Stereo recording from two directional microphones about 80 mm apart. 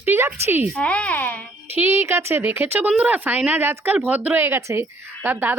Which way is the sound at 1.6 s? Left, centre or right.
Right.